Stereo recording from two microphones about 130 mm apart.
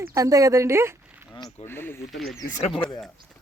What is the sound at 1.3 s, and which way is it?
Speech, 35° left (ahead or behind).